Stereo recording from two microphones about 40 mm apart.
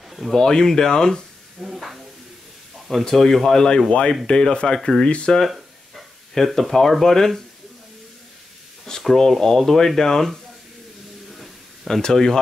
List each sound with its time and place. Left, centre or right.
0.1 s speech: centre
0.4 s speech: centre
1.6 s speech: centre
2.9 s speech: centre
5.0 s speech: left
6.3 s speech: centre
9.0 s speech: centre
11.3 s a sound: centre
11.9 s speech: centre